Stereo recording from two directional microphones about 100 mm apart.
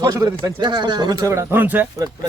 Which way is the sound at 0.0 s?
35° right (ahead or behind).